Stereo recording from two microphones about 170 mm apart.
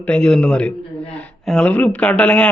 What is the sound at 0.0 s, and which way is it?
A man's voice, 5° left (ahead or behind).